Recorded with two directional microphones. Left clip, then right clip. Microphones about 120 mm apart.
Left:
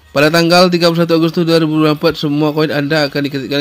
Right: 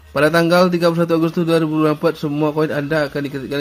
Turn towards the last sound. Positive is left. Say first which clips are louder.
# left 6 dB
turn(degrees=25)  # may be behind; listen again after turning